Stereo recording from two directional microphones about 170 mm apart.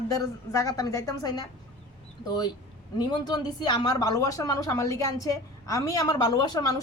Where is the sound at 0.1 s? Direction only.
20° left (ahead or behind).